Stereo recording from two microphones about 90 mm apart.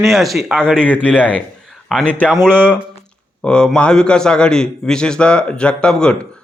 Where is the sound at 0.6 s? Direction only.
10° left (ahead or behind).